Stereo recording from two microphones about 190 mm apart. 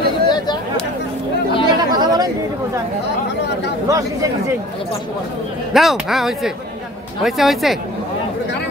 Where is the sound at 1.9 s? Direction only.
20° right (ahead or behind).